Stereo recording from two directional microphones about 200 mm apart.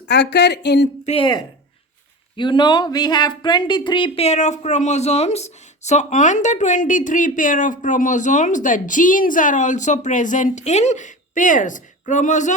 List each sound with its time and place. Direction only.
0.1 s speech: 60° left (ahead or behind)
1.0 s speech: 25° left (ahead or behind)